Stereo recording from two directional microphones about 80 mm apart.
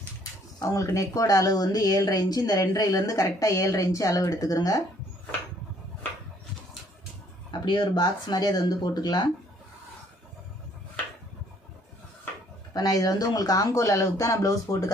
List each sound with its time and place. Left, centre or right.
0.6 s speech: left
7.6 s speech: left
12.7 s speech: left